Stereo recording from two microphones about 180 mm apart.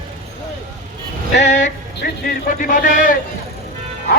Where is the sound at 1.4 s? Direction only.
40° left (ahead or behind).